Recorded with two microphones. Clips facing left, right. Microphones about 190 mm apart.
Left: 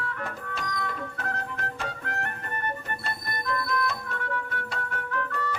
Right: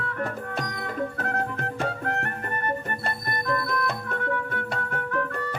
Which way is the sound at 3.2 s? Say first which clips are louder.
Right 3 dB; 55° right (ahead or behind).